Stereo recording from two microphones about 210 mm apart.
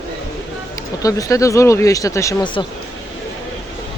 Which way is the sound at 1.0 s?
15° left (ahead or behind).